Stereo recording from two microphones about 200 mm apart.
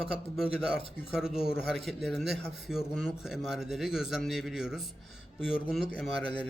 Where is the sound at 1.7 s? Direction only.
Centre (ahead or behind).